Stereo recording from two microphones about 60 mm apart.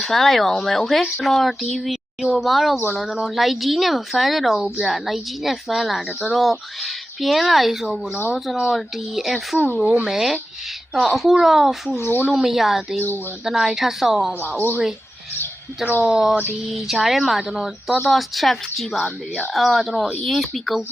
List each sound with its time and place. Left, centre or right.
0.0 s speech: centre
11.9 s speech: left
12.3 s speech: centre
16.0 s speech: centre